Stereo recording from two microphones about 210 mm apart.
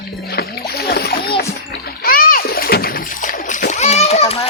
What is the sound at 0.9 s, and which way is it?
Music, 50° left (ahead or behind).